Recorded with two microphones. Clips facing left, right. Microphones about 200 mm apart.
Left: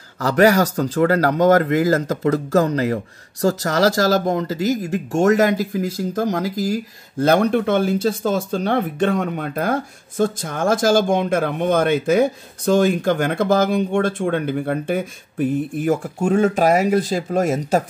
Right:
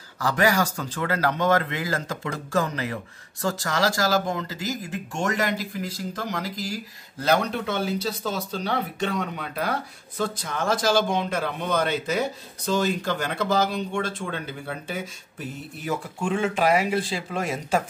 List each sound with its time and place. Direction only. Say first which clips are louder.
0.2 s speech: left 8 dB; 40° left (ahead or behind)